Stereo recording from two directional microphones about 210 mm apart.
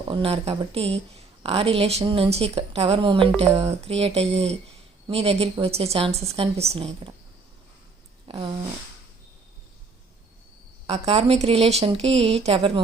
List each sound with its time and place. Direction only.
0.1 s a woman's voice: 25° right (ahead or behind)
8.3 s a woman's voice: 25° right (ahead or behind)
10.8 s a woman's voice: 30° right (ahead or behind)